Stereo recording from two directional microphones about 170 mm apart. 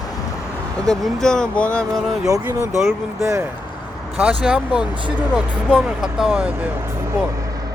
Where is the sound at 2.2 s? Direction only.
20° right (ahead or behind).